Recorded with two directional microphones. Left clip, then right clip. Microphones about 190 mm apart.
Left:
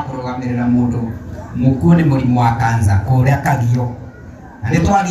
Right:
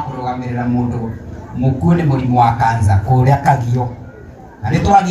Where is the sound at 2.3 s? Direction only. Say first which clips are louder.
Right 6 dB; 25° left (ahead or behind).